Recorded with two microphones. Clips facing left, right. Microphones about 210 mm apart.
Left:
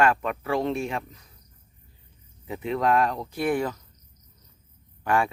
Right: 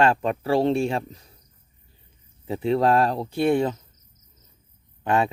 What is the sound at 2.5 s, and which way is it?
Speech, 30° right (ahead or behind).